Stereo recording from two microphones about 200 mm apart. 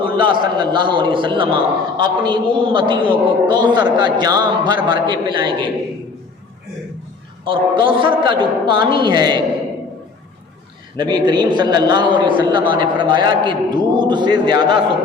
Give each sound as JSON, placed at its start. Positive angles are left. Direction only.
{"t": 0.0, "sound": "a man's voice", "side_deg": -25}
{"t": 7.4, "sound": "a man's voice", "side_deg": -25}
{"t": 10.9, "sound": "a man's voice", "side_deg": -25}